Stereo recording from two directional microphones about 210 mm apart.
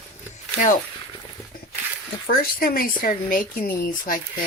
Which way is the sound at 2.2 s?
45° left (ahead or behind).